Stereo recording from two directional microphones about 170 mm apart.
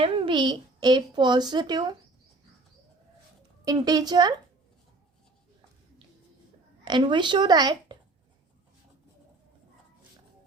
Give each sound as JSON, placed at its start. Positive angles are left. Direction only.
{"t": 0.0, "sound": "a child's voice", "side_deg": -30}
{"t": 3.6, "sound": "a child's voice", "side_deg": -25}
{"t": 6.8, "sound": "a child's voice", "side_deg": -25}